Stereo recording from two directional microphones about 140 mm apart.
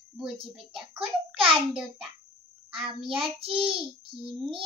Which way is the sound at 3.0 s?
40° right (ahead or behind).